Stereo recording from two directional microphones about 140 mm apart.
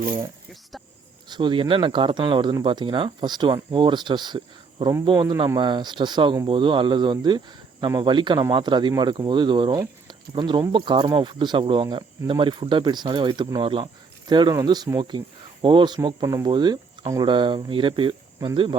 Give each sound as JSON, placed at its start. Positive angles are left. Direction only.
{"t": 1.3, "sound": "speech", "side_deg": -35}